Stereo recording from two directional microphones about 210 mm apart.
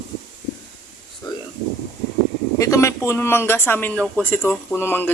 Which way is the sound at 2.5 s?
15° left (ahead or behind).